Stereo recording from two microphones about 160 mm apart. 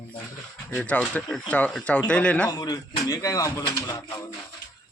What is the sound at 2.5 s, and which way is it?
Speech, 25° left (ahead or behind).